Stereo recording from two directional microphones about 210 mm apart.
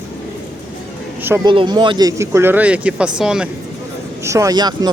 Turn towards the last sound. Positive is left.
turn(degrees=-20)  # may be behind; listen again after turning